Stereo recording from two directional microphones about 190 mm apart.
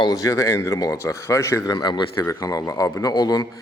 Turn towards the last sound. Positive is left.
turn(degrees=20)  # may be behind; listen again after turning